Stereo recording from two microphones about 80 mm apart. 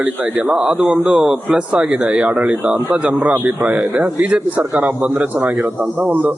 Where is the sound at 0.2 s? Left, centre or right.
Right.